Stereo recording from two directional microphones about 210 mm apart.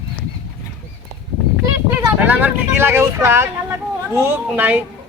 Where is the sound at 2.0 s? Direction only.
10° right (ahead or behind).